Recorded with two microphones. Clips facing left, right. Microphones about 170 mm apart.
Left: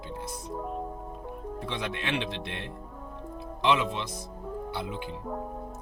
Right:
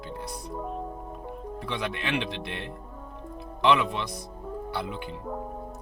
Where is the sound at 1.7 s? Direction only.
25° left (ahead or behind).